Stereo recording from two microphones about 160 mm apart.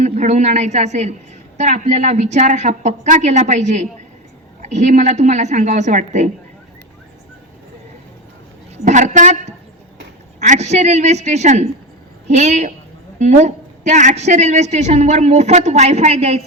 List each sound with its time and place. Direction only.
0.0 s a woman's voice: 45° right (ahead or behind)
8.8 s a woman's voice: 50° right (ahead or behind)